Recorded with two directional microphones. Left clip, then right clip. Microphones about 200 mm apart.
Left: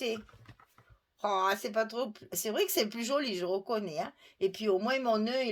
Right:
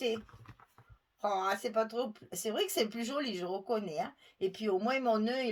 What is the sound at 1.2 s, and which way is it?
Speech, 40° left (ahead or behind).